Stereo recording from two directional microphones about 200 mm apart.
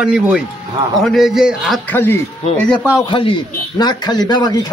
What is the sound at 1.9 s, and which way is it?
Speech, 10° left (ahead or behind).